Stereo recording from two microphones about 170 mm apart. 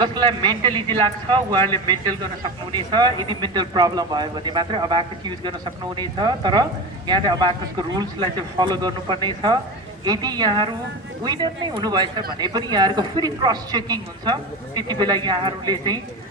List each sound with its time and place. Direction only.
0.0 s speech: 25° right (ahead or behind)